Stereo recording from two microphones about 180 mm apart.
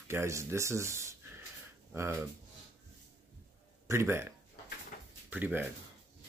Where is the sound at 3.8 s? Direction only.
15° right (ahead or behind).